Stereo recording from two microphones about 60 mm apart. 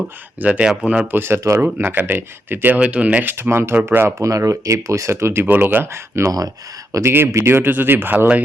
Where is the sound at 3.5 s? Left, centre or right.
Right.